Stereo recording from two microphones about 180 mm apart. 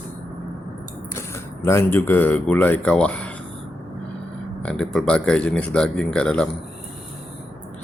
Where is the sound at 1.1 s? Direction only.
15° left (ahead or behind).